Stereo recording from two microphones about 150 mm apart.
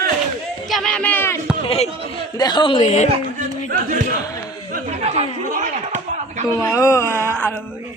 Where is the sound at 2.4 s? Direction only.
30° left (ahead or behind); by 3.1 s 45° left (ahead or behind).